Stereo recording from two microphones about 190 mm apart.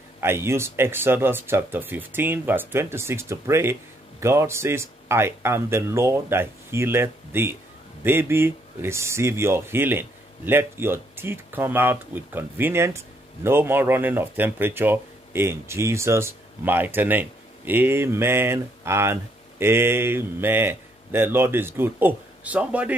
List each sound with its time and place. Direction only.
0.2 s speech: 15° right (ahead or behind)